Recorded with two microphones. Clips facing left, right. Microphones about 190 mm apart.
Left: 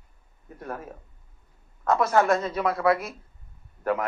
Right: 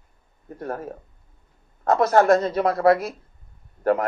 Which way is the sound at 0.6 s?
40° right (ahead or behind).